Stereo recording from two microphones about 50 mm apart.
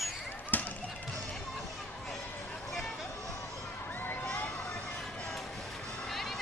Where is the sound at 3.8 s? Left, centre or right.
Left.